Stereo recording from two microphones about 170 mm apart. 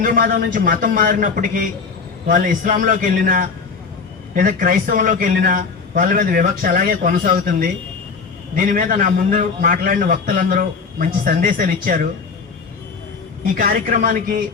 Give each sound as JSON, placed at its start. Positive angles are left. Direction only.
{"t": 0.0, "sound": "a man's voice", "side_deg": -55}
{"t": 13.6, "sound": "a man's voice", "side_deg": -55}